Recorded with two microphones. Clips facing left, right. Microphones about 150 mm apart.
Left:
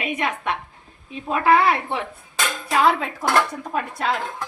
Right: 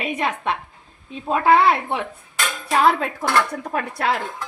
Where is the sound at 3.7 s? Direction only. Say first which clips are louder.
Right 2 dB; 70° right (ahead or behind).